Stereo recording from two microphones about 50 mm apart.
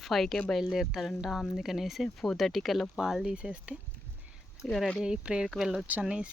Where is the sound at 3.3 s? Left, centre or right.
Right.